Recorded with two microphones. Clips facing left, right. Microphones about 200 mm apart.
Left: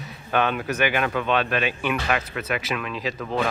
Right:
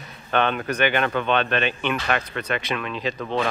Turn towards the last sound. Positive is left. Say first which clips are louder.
# right 1 dB
turn(degrees=5)  # may be behind; listen again after turning